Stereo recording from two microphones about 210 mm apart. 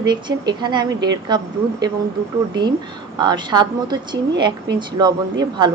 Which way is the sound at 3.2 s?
20° right (ahead or behind).